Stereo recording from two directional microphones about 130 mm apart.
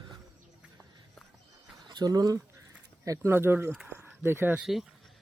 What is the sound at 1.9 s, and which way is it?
Speech, 30° right (ahead or behind).